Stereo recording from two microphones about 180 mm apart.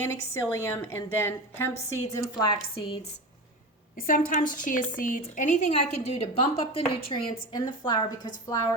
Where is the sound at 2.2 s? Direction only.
30° left (ahead or behind).